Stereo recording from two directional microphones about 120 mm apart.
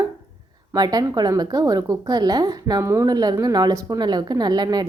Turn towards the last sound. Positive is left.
turn(degrees=-35)  # may be behind; listen again after turning